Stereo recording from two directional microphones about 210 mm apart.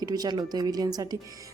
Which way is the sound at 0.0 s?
20° right (ahead or behind).